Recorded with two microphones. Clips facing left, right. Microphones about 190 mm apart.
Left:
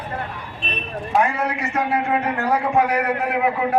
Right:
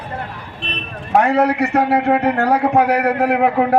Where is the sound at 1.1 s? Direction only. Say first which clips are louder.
Right 7 dB; 65° right (ahead or behind).